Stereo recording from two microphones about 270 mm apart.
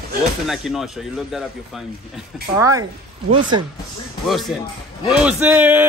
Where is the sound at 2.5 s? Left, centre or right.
Centre.